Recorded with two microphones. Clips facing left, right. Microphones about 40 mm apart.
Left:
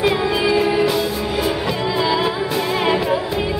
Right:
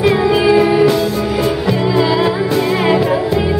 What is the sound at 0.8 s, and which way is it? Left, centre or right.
Music, centre.